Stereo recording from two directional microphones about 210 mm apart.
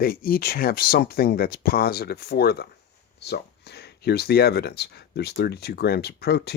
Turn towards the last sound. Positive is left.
turn(degrees=50)  # may be behind; listen again after turning